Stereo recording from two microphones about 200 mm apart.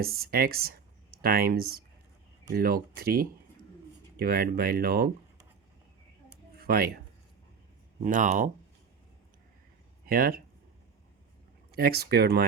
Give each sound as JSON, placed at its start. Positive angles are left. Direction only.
{"t": 0.0, "sound": "speech", "side_deg": -50}
{"t": 6.6, "sound": "speech", "side_deg": -50}
{"t": 8.0, "sound": "speech", "side_deg": -40}
{"t": 10.1, "sound": "speech", "side_deg": -45}
{"t": 11.7, "sound": "speech", "side_deg": -50}